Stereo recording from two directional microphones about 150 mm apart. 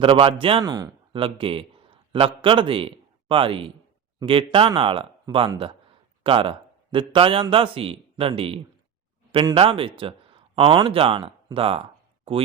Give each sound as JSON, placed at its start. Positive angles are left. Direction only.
{"t": 0.0, "sound": "speech", "side_deg": -35}
{"t": 0.6, "sound": "speech", "side_deg": -25}
{"t": 1.1, "sound": "a man's voice", "side_deg": -35}
{"t": 11.5, "sound": "a sound", "side_deg": -40}